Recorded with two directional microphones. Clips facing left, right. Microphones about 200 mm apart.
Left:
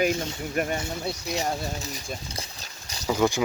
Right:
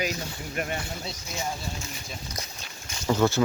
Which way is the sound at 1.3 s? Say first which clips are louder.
Left 3 dB; 35° left (ahead or behind).